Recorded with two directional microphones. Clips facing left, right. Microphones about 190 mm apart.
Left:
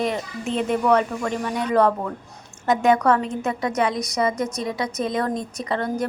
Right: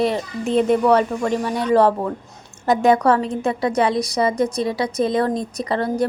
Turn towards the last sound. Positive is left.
turn(degrees=-35)  # may be behind; listen again after turning